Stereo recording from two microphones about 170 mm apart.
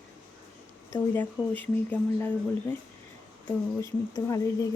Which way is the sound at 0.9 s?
10° left (ahead or behind).